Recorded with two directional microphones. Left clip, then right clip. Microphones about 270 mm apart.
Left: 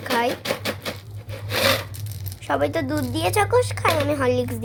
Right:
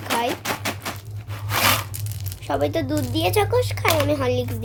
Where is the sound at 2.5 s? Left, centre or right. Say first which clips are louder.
Even; centre.